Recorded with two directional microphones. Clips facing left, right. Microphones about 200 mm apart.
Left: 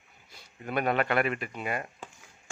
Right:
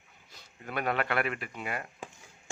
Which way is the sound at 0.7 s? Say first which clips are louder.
Left 4 dB; 20° left (ahead or behind).